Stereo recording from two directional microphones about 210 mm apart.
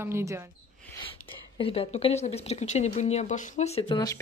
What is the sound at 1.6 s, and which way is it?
Speech, 25° left (ahead or behind).